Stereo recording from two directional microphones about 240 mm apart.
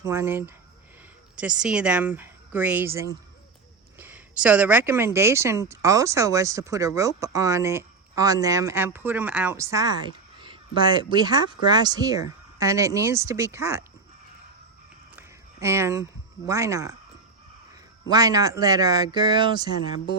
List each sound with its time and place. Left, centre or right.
0.0 s speech: centre
15.6 s speech: centre
18.1 s speech: centre